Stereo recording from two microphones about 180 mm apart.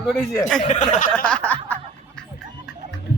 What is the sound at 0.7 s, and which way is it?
Speech, 40° left (ahead or behind).